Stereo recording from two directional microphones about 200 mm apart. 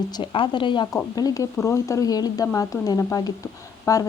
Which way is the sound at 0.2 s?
25° left (ahead or behind).